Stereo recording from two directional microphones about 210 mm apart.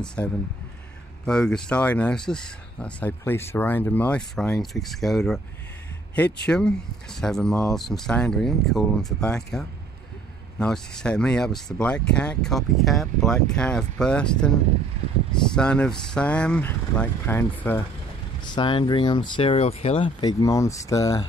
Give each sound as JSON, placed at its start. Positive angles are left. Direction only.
{"t": 0.0, "sound": "speech", "side_deg": 5}
{"t": 6.4, "sound": "speech", "side_deg": 5}
{"t": 15.5, "sound": "speech", "side_deg": 5}
{"t": 18.4, "sound": "speech", "side_deg": 20}